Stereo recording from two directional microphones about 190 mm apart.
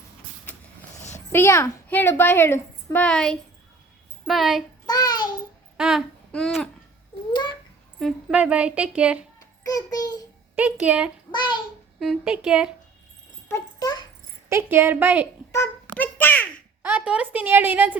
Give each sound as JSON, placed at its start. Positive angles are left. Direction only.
{"t": 1.3, "sound": "a child's voice", "side_deg": 15}
{"t": 4.9, "sound": "child singing", "side_deg": 20}
{"t": 5.7, "sound": "a sound", "side_deg": -5}
{"t": 7.9, "sound": "a woman's voice", "side_deg": 0}
{"t": 9.6, "sound": "child singing", "side_deg": 20}
{"t": 10.8, "sound": "a woman's voice", "side_deg": -5}
{"t": 11.3, "sound": "child singing", "side_deg": 25}
{"t": 11.9, "sound": "a woman's voice", "side_deg": -5}
{"t": 13.5, "sound": "a sound", "side_deg": 20}
{"t": 14.5, "sound": "a woman's voice", "side_deg": -10}
{"t": 15.5, "sound": "a sound", "side_deg": 10}
{"t": 16.8, "sound": "a woman's voice", "side_deg": -5}